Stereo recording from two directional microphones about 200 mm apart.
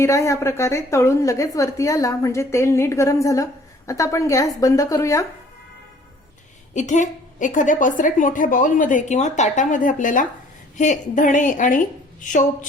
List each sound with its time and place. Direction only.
0.0 s a woman's voice: 15° left (ahead or behind)
6.7 s a woman's voice: 35° left (ahead or behind)